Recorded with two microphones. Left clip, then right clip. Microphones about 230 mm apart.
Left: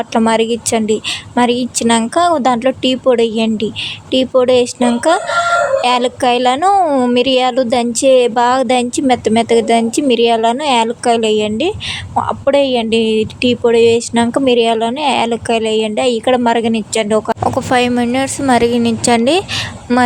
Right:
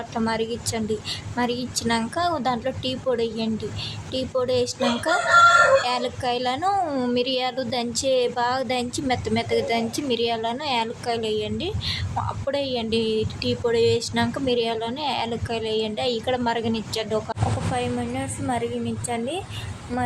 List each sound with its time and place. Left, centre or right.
0.1 s speech: left
6.7 s speech: left